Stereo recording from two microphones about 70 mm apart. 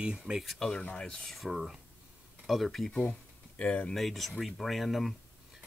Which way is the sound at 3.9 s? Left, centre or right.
Centre.